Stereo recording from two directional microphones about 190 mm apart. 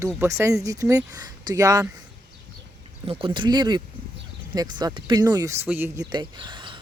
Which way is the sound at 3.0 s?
30° right (ahead or behind).